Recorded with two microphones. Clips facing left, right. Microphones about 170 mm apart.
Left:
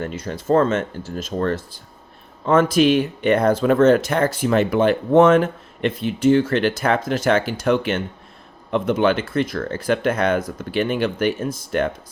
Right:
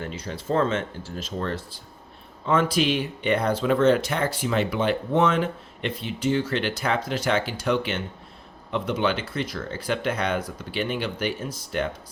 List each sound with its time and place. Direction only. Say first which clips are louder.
0.0 s speech: left 6 dB; 50° left (ahead or behind)